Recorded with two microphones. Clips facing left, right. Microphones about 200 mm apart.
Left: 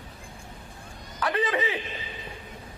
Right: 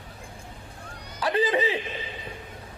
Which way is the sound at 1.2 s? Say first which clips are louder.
Right 3 dB; 30° right (ahead or behind).